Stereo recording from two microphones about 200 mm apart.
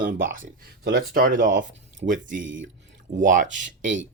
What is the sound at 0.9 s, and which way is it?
Speech, 45° right (ahead or behind).